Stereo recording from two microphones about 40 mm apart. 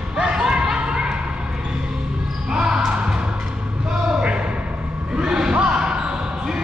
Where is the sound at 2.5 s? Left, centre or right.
Centre.